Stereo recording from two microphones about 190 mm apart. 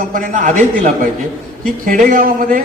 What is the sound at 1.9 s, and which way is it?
Speech, 45° right (ahead or behind).